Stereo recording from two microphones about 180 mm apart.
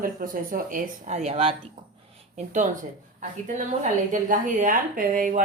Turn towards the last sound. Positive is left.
turn(degrees=-50)  # may be behind; listen again after turning